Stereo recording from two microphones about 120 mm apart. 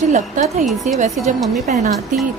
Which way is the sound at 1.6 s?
90° right.